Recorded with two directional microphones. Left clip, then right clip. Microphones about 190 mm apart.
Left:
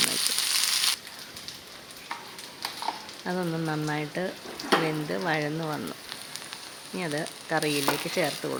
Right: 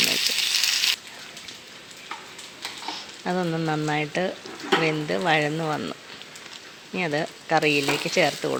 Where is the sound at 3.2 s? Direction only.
10° right (ahead or behind).